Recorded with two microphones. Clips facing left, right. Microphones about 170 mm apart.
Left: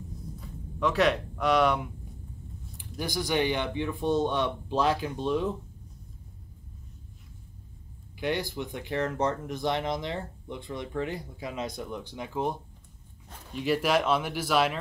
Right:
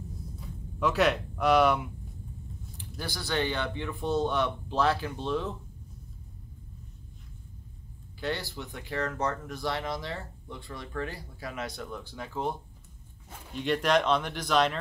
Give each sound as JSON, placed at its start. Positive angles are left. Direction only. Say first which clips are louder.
{"t": 0.7, "sound": "speech", "louder": "left 1 dB", "side_deg": 0}
{"t": 3.0, "sound": "speech", "louder": "left 4 dB", "side_deg": 15}
{"t": 8.2, "sound": "speech", "louder": "left 4 dB", "side_deg": 15}
{"t": 13.3, "sound": "speech", "louder": "left 2 dB", "side_deg": 0}